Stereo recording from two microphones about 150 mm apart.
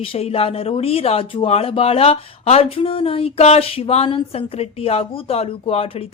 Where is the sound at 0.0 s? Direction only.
40° left (ahead or behind).